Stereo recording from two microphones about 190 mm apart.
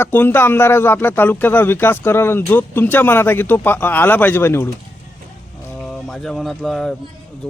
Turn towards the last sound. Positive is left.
turn(degrees=0)  # may be behind; listen again after turning